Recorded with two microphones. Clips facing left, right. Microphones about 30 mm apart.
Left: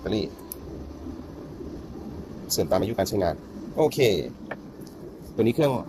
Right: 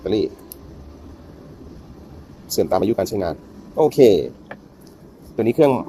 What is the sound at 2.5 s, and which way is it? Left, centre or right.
Speech, centre.